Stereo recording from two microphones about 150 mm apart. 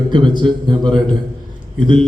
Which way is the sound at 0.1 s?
35° right (ahead or behind).